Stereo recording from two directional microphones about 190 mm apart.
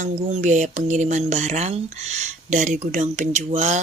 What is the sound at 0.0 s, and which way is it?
Speech, 35° right (ahead or behind).